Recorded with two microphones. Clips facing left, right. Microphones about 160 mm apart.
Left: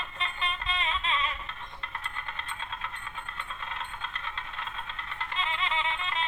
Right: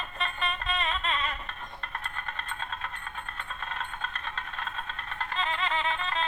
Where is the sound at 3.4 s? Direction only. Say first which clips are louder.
Right 1 dB; 40° right (ahead or behind).